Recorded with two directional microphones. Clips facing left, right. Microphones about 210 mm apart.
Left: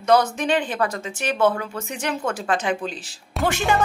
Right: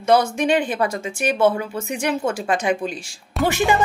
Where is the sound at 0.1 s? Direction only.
10° right (ahead or behind).